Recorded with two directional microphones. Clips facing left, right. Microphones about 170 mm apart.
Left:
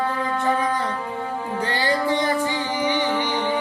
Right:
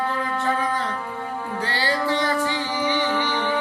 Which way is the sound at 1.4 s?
20° left (ahead or behind).